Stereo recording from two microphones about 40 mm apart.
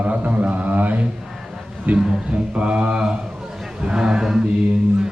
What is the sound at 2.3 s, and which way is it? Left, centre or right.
A man's voice, right.